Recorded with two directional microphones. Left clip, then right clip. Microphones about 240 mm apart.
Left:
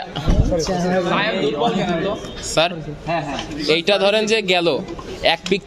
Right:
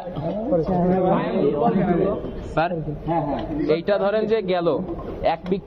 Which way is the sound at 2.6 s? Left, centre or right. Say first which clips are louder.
Left 4 dB; left.